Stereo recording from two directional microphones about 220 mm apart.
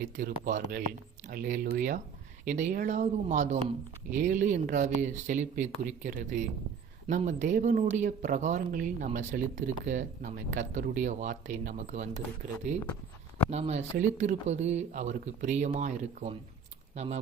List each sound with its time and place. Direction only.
0.0 s speech: 40° right (ahead or behind)
13.5 s speech: 30° right (ahead or behind)